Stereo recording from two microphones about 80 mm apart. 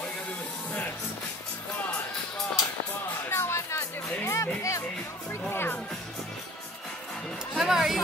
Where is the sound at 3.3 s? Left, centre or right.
Left.